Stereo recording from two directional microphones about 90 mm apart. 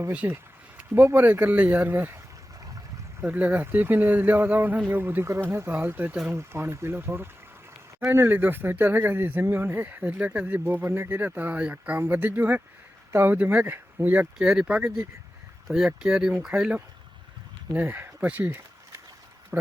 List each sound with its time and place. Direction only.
0.1 s speech: 15° right (ahead or behind)
3.2 s speech: 15° right (ahead or behind)
14.3 s speech: 5° right (ahead or behind)
17.7 s speech: 20° right (ahead or behind)